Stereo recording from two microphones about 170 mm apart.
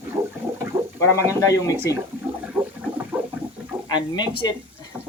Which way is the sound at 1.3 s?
20° left (ahead or behind).